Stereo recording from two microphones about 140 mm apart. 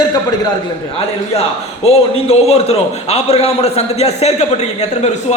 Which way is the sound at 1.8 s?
45° left (ahead or behind).